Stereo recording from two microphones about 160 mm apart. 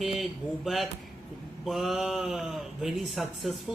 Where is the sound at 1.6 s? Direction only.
Centre (ahead or behind).